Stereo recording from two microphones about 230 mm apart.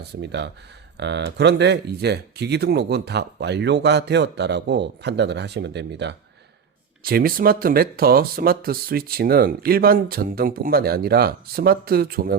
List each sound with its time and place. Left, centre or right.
0.0 s speech: right